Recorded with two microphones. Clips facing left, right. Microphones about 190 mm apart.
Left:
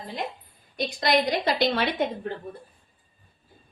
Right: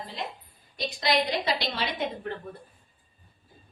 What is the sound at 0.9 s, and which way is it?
A woman's voice, 50° left (ahead or behind).